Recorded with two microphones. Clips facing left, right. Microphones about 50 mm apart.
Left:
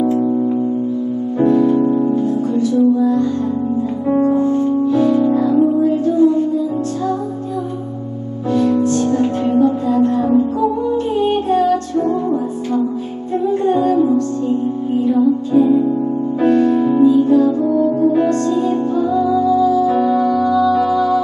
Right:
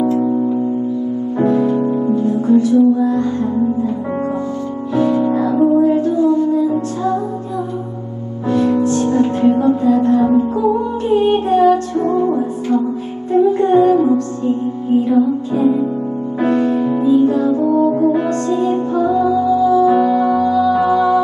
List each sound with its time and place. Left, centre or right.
1.4 s music: right
4.9 s music: right
8.5 s music: right